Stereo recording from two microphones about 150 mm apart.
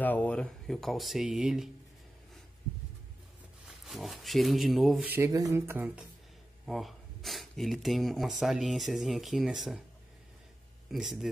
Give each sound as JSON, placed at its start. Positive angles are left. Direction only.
{"t": 0.0, "sound": "speech", "side_deg": 10}
{"t": 3.6, "sound": "speech", "side_deg": 0}
{"t": 5.0, "sound": "speech", "side_deg": -10}
{"t": 6.6, "sound": "speech", "side_deg": 0}
{"t": 10.9, "sound": "speech", "side_deg": 0}